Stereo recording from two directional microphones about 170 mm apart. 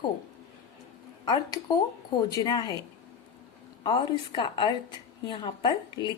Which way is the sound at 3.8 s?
30° left (ahead or behind).